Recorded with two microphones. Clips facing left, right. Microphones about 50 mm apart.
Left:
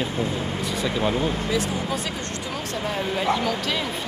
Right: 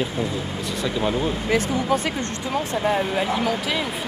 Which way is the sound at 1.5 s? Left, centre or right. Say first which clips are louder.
Right 4 dB; right.